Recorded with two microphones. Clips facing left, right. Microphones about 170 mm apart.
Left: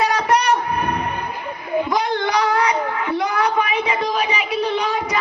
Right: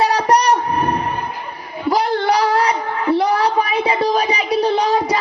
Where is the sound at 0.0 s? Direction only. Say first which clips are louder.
Right 3 dB; 35° right (ahead or behind).